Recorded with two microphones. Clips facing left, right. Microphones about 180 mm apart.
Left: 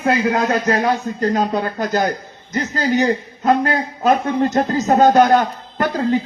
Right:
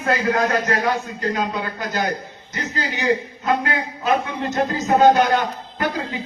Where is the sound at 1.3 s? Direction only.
45° left (ahead or behind).